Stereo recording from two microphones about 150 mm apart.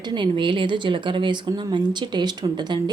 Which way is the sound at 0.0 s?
30° right (ahead or behind).